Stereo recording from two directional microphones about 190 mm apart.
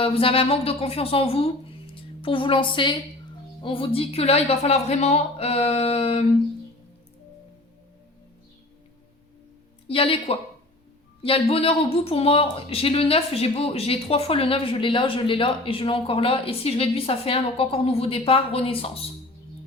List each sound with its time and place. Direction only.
0.0 s a woman's voice: 30° left (ahead or behind)
9.8 s speech: 30° left (ahead or behind)